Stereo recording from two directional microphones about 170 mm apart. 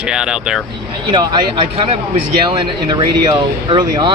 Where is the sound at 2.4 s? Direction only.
25° right (ahead or behind).